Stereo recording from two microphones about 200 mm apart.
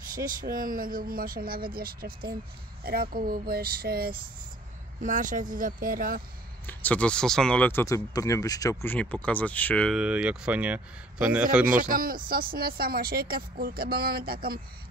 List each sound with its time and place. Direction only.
0.1 s speech: 45° right (ahead or behind)
6.6 s speech: 10° left (ahead or behind)
9.9 s speech: 5° right (ahead or behind)
11.6 s speech: 45° right (ahead or behind)